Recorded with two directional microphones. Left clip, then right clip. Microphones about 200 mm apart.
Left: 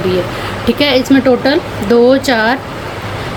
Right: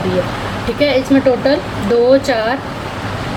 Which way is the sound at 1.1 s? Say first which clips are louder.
Left 2 dB; 55° left (ahead or behind).